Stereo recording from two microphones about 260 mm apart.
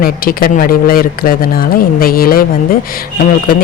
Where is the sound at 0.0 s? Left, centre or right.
Left.